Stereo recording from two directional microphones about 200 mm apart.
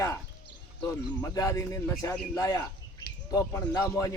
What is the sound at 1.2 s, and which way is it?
A man's voice, 15° left (ahead or behind).